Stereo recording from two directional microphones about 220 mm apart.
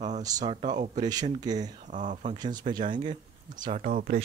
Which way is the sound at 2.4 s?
20° right (ahead or behind).